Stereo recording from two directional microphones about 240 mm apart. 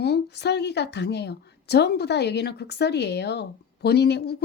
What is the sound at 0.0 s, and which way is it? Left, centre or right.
A woman's voice, left.